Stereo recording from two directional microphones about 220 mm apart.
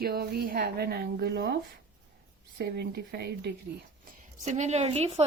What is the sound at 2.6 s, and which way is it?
Speech, 50° right (ahead or behind).